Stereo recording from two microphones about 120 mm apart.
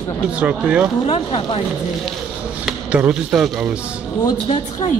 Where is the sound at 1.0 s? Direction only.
50° left (ahead or behind).